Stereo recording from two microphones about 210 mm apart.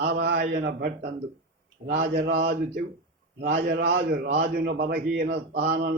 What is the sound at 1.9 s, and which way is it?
A man's voice, 45° right (ahead or behind).